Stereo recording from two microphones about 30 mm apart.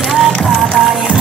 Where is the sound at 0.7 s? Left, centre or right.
Centre.